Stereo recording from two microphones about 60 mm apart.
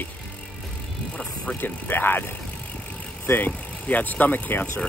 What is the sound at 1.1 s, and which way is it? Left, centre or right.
Speech, centre.